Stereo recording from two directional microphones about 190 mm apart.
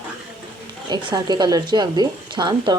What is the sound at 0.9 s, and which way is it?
Speech, 25° right (ahead or behind).